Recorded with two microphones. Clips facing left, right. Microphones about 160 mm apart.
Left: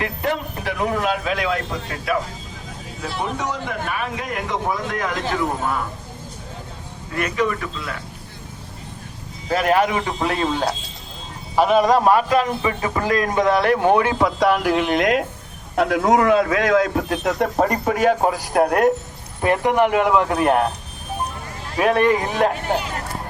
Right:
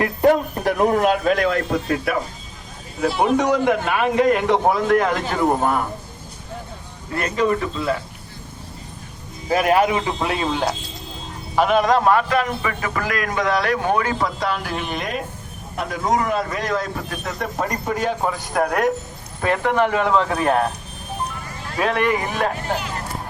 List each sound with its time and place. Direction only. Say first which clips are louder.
0.0 s a man's voice: right 7 dB; 40° right (ahead or behind)
3.0 s a man's voice: right 8 dB; 70° right (ahead or behind); by 5.8 s 50° right (ahead or behind)
7.2 s a man's voice: right 2 dB; 30° right (ahead or behind)
9.5 s a man's voice: right 1 dB; 10° right (ahead or behind)
11.5 s a man's voice: left 1 dB; 5° left (ahead or behind); by 14.3 s 20° left (ahead or behind)
14.3 s a man's voice: left 7 dB; 70° left (ahead or behind)
18.2 s a man's voice: left 3 dB; 40° left (ahead or behind)
19.4 s speech: left 2 dB; 15° left (ahead or behind)
21.8 s speech: left 3 dB; 15° left (ahead or behind)